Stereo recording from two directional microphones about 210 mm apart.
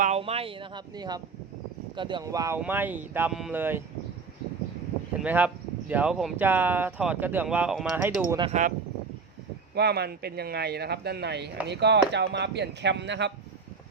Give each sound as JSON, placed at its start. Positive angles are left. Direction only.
{"t": 0.0, "sound": "speech", "side_deg": -30}
{"t": 5.2, "sound": "speech", "side_deg": -10}
{"t": 8.4, "sound": "speech", "side_deg": -35}
{"t": 9.7, "sound": "speech", "side_deg": -50}